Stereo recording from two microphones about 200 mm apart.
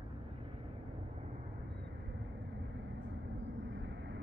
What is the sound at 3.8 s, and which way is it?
Vehicle, 60° right (ahead or behind).